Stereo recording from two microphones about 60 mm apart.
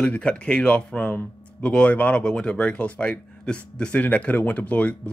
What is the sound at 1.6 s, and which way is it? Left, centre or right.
Speech, centre.